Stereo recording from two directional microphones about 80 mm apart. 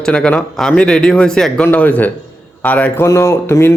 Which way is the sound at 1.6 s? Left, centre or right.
Centre.